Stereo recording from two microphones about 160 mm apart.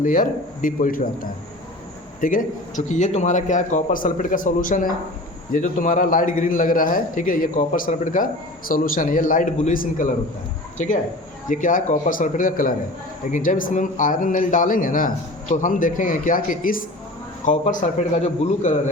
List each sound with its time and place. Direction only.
0.0 s a man's voice: 55° left (ahead or behind)
11.4 s a man's voice: 55° left (ahead or behind)